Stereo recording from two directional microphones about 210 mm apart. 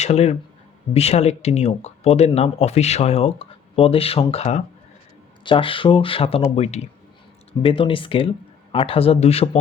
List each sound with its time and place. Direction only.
0.0 s speech: 30° left (ahead or behind)